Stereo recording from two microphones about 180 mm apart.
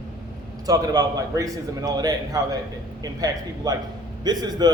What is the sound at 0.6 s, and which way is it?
Speech, 20° right (ahead or behind).